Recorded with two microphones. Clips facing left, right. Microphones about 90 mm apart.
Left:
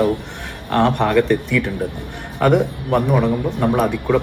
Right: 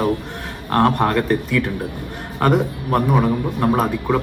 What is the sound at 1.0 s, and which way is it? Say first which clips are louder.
Speech: left 2 dB; 20° right (ahead or behind).